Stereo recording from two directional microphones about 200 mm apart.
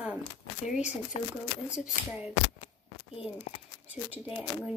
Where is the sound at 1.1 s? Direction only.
30° left (ahead or behind).